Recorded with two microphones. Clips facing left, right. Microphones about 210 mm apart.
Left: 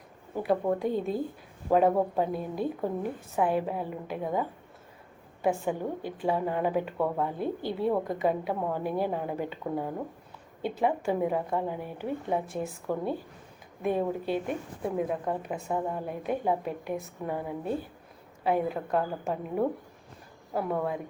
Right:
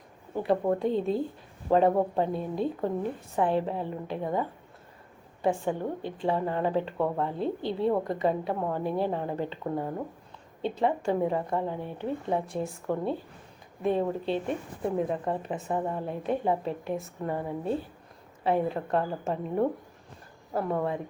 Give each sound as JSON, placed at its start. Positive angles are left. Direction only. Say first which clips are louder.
{"t": 0.3, "sound": "speech", "louder": "right 1 dB", "side_deg": 5}
{"t": 2.2, "sound": "a woman's voice", "louder": "right 1 dB", "side_deg": 5}
{"t": 7.3, "sound": "a woman's voice", "louder": "right 1 dB", "side_deg": -25}
{"t": 7.9, "sound": "a woman's voice", "louder": "right 1 dB", "side_deg": 5}